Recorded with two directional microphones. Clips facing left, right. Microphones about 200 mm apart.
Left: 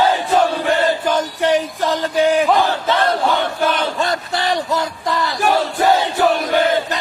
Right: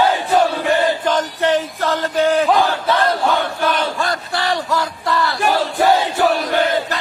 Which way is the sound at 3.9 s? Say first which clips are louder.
Left 1 dB; 20° left (ahead or behind).